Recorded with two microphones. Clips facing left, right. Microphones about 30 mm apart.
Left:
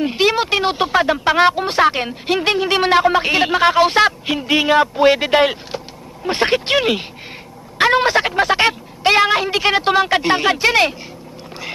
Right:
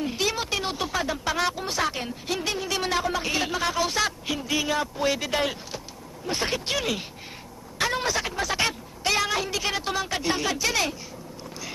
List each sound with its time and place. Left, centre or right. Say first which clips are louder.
0.0 s speech: left 11 dB; left